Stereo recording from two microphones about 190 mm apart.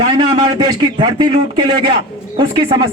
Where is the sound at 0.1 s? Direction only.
20° right (ahead or behind).